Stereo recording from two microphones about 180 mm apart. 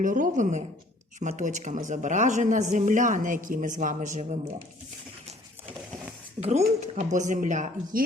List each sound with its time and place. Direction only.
0.0 s speech: 45° right (ahead or behind)
6.4 s speech: 40° right (ahead or behind)